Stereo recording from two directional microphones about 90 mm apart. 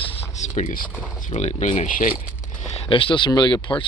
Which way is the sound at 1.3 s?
90° left.